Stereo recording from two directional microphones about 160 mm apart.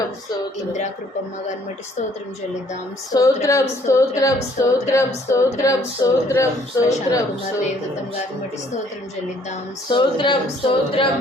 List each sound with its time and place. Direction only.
3.1 s speech: 20° left (ahead or behind)
9.9 s speech: 30° left (ahead or behind)